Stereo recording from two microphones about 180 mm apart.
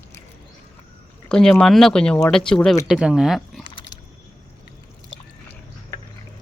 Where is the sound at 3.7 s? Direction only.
25° left (ahead or behind).